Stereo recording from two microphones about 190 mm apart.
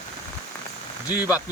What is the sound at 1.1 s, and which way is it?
Speech, 10° right (ahead or behind).